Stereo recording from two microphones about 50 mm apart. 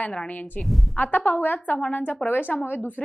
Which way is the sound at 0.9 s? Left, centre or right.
Left.